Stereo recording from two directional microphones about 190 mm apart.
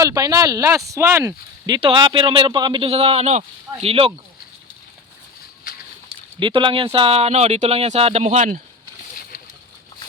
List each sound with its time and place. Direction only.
0.0 s speech: 20° right (ahead or behind)
6.4 s speech: 25° right (ahead or behind); by 8.6 s 40° right (ahead or behind)